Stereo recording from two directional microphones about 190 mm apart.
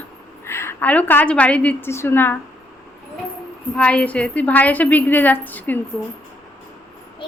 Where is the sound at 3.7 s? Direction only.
5° left (ahead or behind).